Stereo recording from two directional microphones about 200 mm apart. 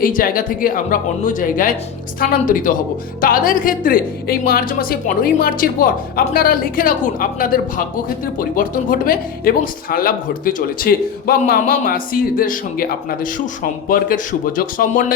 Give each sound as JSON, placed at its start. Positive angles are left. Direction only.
{"t": 0.0, "sound": "speech", "side_deg": 45}